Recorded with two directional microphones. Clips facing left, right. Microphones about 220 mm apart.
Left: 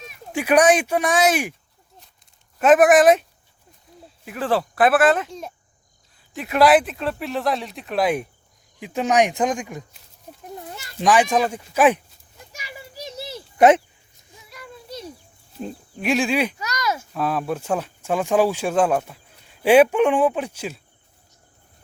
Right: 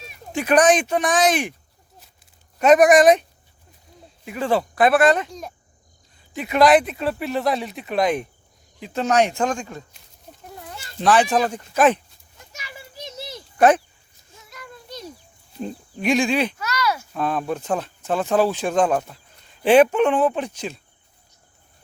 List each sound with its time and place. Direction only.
0.3 s speech: 10° left (ahead or behind)
2.6 s speech: 5° left (ahead or behind)
3.9 s a sound: centre (ahead or behind)
4.3 s speech: centre (ahead or behind)
6.3 s speech: centre (ahead or behind); by 9.8 s 15° left (ahead or behind)
11.0 s speech: 10° left (ahead or behind)
12.5 s children playing: 10° left (ahead or behind)
13.6 s speech: 20° left (ahead or behind)
14.5 s a sound: 5° left (ahead or behind)
15.5 s speech: centre (ahead or behind); by 17.1 s 20° left (ahead or behind)
17.2 s speech: 5° left (ahead or behind)